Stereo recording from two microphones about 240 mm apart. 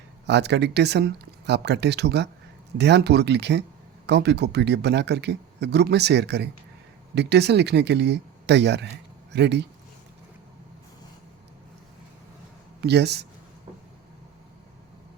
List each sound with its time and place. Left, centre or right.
0.3 s speech: right
12.8 s speech: right